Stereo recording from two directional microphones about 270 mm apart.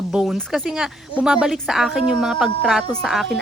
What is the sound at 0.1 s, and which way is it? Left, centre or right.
Speech, centre.